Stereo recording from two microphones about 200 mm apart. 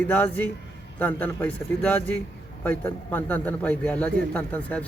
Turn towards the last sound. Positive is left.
turn(degrees=5)  # may be behind; listen again after turning